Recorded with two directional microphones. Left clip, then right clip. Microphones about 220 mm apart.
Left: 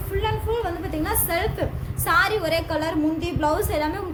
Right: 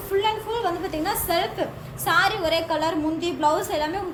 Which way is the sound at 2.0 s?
30° left (ahead or behind).